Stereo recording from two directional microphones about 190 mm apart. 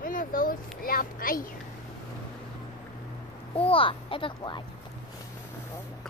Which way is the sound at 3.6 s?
30° left (ahead or behind).